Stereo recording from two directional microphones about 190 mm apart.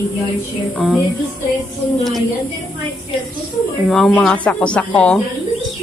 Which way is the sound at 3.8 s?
5° left (ahead or behind).